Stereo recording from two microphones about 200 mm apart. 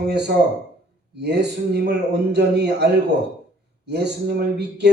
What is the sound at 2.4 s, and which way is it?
A man's voice, 55° right (ahead or behind).